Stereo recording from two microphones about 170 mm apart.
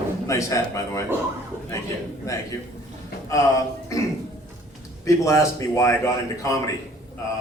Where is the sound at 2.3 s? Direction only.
20° left (ahead or behind).